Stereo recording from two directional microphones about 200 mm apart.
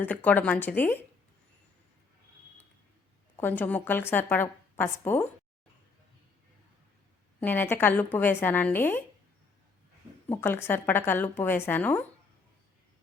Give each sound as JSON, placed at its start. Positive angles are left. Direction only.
{"t": 0.0, "sound": "a woman's voice", "side_deg": 10}
{"t": 3.3, "sound": "a woman's voice", "side_deg": 10}
{"t": 7.3, "sound": "a woman's voice", "side_deg": 10}
{"t": 10.2, "sound": "a woman's voice", "side_deg": 10}